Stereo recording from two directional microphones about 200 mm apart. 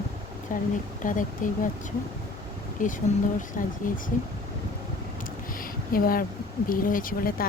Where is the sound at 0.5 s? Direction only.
40° left (ahead or behind).